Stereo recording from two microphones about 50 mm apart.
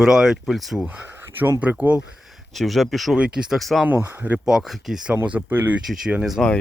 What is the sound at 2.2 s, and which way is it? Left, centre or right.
Speech, centre.